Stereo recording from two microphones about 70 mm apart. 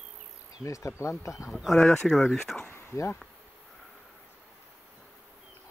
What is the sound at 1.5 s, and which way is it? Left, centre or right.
Speech, centre.